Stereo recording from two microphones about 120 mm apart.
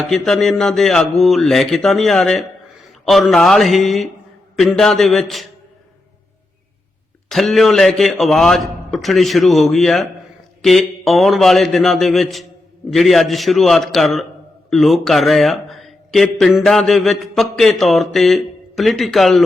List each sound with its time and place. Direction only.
0.0 s a man's voice: centre (ahead or behind)
7.3 s a man's voice: centre (ahead or behind)